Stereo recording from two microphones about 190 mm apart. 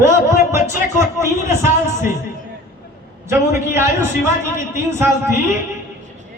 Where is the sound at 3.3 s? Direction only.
15° right (ahead or behind).